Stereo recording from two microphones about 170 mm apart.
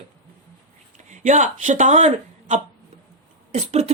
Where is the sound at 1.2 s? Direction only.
45° right (ahead or behind).